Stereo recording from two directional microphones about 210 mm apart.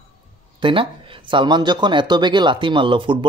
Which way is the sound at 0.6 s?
25° right (ahead or behind).